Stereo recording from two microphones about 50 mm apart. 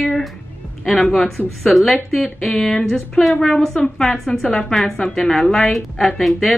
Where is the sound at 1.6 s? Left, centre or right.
Centre.